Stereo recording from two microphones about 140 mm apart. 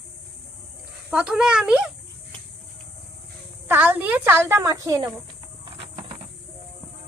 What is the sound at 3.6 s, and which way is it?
Speech, 15° right (ahead or behind).